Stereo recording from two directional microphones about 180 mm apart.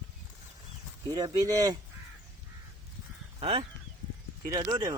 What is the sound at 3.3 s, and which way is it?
Speech, 30° right (ahead or behind).